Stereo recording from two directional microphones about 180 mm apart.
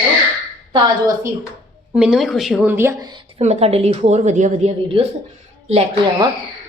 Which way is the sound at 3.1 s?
35° right (ahead or behind).